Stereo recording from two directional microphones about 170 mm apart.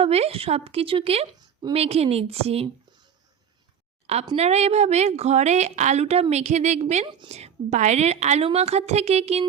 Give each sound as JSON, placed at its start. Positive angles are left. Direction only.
{"t": 0.0, "sound": "a woman's voice", "side_deg": -35}
{"t": 4.0, "sound": "a woman's voice", "side_deg": -40}